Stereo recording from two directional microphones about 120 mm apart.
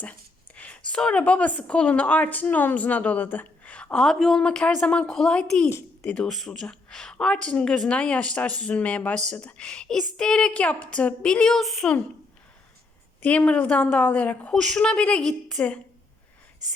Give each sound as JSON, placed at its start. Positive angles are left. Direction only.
{"t": 0.0, "sound": "a woman's voice", "side_deg": 10}
{"t": 13.2, "sound": "a woman's voice", "side_deg": 10}